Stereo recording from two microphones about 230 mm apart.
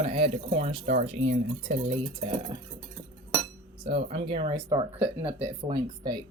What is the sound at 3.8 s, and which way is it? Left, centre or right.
Speech, right.